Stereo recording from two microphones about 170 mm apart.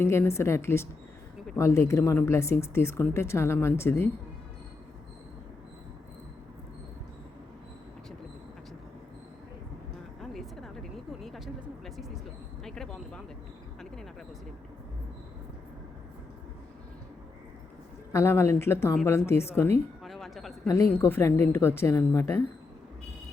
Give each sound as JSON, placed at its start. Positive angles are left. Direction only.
{"t": 0.0, "sound": "speech", "side_deg": 15}
{"t": 10.2, "sound": "vehicle", "side_deg": 0}
{"t": 12.6, "sound": "a sound", "side_deg": 5}
{"t": 18.1, "sound": "speech", "side_deg": 15}
{"t": 20.1, "sound": "a sound", "side_deg": 0}
{"t": 20.7, "sound": "speech", "side_deg": 20}